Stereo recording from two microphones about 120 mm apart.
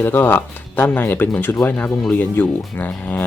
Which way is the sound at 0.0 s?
15° left (ahead or behind).